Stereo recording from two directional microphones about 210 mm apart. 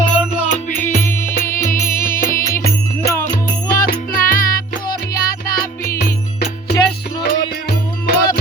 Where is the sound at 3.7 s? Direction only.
40° left (ahead or behind).